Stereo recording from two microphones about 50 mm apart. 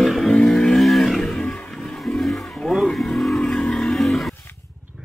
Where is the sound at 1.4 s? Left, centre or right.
Left.